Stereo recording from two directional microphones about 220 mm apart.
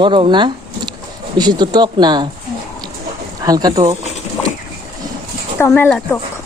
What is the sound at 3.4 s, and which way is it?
Speech, 15° right (ahead or behind).